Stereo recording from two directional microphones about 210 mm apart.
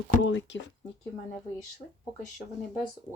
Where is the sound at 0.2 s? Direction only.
60° left (ahead or behind).